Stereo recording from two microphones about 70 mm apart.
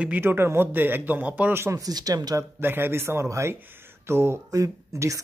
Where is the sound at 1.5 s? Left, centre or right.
Right.